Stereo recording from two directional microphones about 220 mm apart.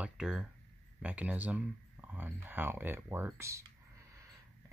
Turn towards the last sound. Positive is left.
turn(degrees=-10)  # may be behind; listen again after turning